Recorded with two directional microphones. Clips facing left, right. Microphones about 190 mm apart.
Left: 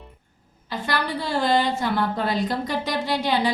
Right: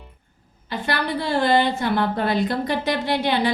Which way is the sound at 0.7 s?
60° right (ahead or behind).